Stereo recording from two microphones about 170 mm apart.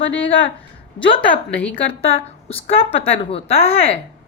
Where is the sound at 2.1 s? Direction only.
35° left (ahead or behind).